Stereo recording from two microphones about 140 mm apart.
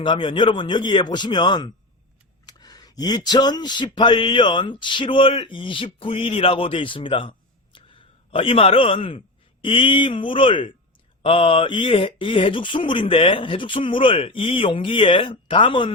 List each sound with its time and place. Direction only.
0.0 s speech: 35° left (ahead or behind)